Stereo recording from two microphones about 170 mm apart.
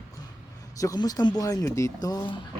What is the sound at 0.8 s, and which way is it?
A man's voice, 20° left (ahead or behind).